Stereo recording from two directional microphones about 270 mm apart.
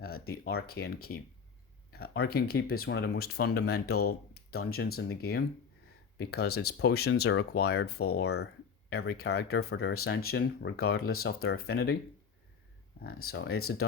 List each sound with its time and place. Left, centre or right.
0.0 s speech: left
13.2 s speech: left